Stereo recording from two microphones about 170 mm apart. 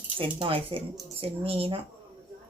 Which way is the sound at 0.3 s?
35° right (ahead or behind).